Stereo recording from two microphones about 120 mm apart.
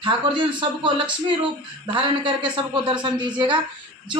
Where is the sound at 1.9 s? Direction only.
45° right (ahead or behind).